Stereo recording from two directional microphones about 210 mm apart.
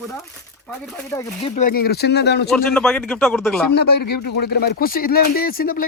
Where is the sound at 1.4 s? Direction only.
35° left (ahead or behind); by 2.5 s 55° left (ahead or behind).